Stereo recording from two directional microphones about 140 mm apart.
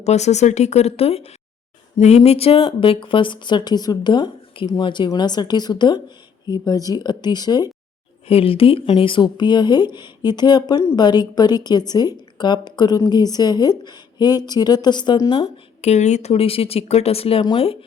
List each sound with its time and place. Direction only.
0.0 s a woman's voice: 50° left (ahead or behind); by 7.7 s 30° left (ahead or behind)
8.3 s a woman's voice: 45° left (ahead or behind)